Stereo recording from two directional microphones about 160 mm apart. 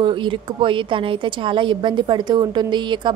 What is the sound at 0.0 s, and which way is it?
A woman's voice, 30° right (ahead or behind).